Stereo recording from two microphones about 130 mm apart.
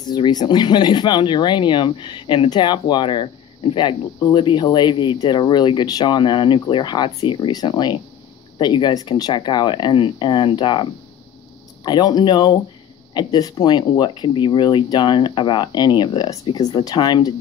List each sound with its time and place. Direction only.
0.0 s speech: 35° left (ahead or behind)